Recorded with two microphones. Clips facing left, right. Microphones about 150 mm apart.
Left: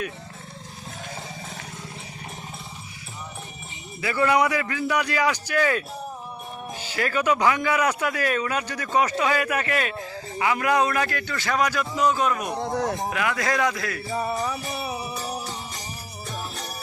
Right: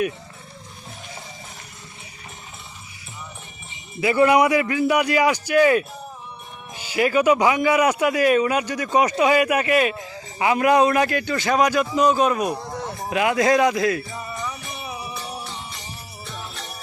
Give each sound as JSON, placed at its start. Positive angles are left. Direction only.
{"t": 4.0, "sound": "a man's voice", "side_deg": -15}
{"t": 14.3, "sound": "music", "side_deg": 35}